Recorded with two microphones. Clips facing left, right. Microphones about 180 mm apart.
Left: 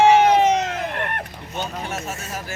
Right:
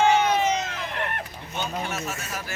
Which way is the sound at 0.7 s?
55° left (ahead or behind).